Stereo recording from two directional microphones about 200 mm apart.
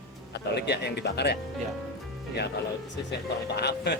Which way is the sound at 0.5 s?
55° left (ahead or behind).